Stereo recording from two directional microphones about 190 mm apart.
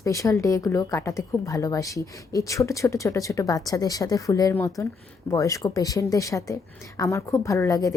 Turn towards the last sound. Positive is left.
turn(degrees=15)  # may be behind; listen again after turning